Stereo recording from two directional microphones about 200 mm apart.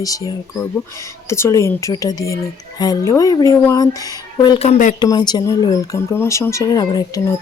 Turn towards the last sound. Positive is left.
turn(degrees=20)  # may be behind; listen again after turning